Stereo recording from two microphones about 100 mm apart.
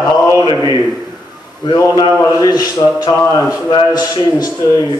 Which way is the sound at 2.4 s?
35° left (ahead or behind).